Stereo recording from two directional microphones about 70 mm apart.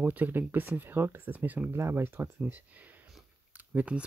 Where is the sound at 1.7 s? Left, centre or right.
Right.